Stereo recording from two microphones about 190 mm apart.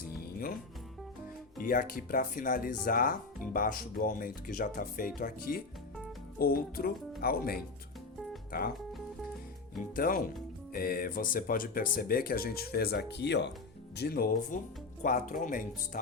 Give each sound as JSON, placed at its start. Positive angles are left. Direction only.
{"t": 0.0, "sound": "music", "side_deg": 50}
{"t": 1.5, "sound": "speech", "side_deg": 50}
{"t": 9.9, "sound": "speech", "side_deg": 50}